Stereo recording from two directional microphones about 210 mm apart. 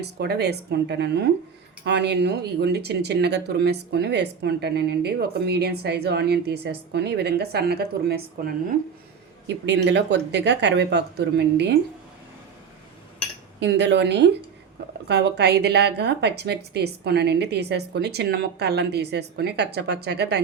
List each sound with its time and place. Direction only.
0.0 s speech: 50° right (ahead or behind)
9.6 s speech: 55° right (ahead or behind)
13.6 s speech: 55° right (ahead or behind)